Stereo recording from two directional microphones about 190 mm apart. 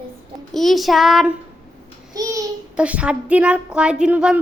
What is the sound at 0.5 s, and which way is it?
Speech, centre (ahead or behind).